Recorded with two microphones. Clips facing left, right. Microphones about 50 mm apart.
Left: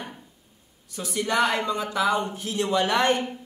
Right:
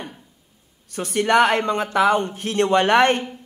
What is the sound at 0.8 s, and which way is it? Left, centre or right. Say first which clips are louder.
Speech: right 7 dB; right.